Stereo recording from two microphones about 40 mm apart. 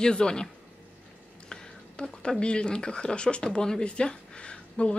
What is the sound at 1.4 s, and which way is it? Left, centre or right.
Whispering, left.